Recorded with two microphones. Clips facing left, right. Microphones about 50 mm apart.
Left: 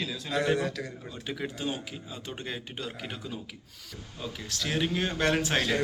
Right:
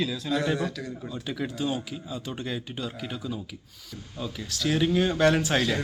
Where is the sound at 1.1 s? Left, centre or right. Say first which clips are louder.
Right 5 dB; left.